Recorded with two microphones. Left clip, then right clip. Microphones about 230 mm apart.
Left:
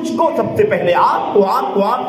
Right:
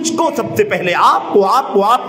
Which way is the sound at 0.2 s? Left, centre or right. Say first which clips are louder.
Left 2 dB; right.